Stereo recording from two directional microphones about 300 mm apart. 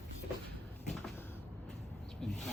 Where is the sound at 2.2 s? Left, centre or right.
Centre.